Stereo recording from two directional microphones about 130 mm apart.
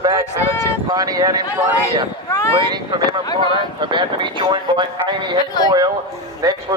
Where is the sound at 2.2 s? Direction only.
25° left (ahead or behind).